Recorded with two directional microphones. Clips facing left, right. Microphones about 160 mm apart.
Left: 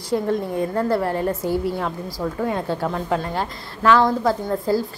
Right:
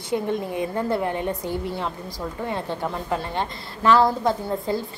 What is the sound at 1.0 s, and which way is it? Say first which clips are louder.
A woman's voice: left 3 dB; centre (ahead or behind).